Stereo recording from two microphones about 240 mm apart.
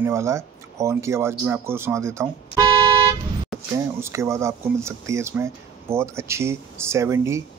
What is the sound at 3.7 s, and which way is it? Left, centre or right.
Speech, centre.